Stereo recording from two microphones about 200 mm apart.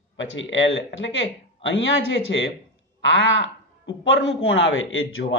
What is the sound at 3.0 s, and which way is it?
A man's voice, 65° left (ahead or behind).